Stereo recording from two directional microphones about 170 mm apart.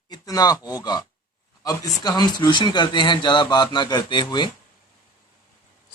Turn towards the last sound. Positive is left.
turn(degrees=25)  # may be behind; listen again after turning